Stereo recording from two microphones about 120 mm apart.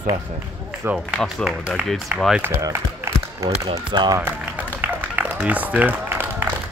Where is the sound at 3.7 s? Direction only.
35° right (ahead or behind).